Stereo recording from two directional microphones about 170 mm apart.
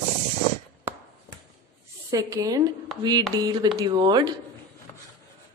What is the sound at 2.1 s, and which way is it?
A woman's voice, 20° right (ahead or behind).